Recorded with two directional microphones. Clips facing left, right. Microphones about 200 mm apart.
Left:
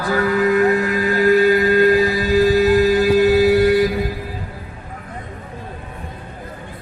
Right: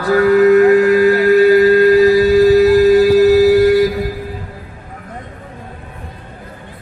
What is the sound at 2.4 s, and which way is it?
Music, 40° right (ahead or behind).